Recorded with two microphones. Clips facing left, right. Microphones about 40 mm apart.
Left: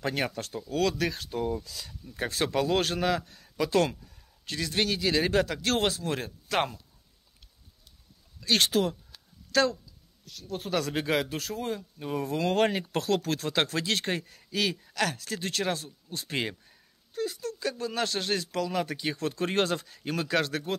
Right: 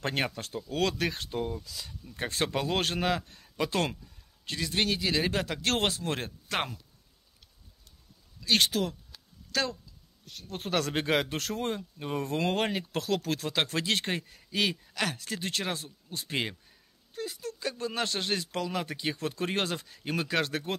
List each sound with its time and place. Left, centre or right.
0.0 s a man's voice: right
0.3 s speech: centre
0.7 s a man's voice: right
1.5 s speech: centre
2.0 s a man's voice: right
4.5 s speech: centre
5.6 s speech: right
6.5 s speech: centre
8.5 s speech: centre
10.2 s speech: right
12.0 s speech: right
12.5 s speech: centre
13.7 s a man's voice: centre